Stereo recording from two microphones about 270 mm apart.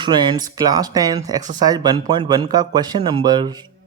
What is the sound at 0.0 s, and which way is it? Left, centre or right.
Speech, centre.